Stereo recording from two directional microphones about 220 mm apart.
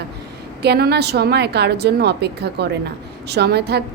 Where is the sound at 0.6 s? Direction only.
45° right (ahead or behind).